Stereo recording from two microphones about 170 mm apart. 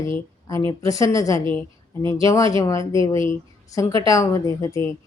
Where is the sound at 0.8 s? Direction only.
20° left (ahead or behind).